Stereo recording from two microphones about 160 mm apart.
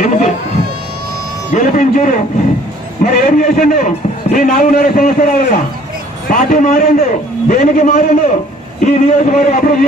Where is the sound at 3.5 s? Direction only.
55° left (ahead or behind).